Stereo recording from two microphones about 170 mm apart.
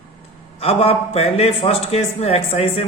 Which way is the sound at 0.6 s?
35° left (ahead or behind).